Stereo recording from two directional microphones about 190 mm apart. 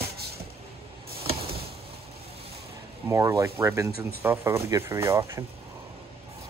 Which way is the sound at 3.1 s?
15° right (ahead or behind).